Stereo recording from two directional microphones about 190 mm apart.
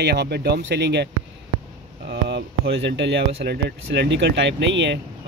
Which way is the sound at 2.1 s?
65° right (ahead or behind).